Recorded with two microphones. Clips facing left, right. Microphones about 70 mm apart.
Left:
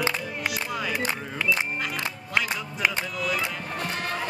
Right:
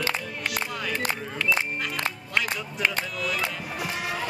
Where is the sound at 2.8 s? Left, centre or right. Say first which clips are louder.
Left 1 dB; centre.